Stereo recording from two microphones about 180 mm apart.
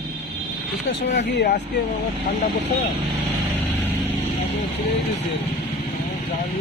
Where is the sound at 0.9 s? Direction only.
75° left (ahead or behind).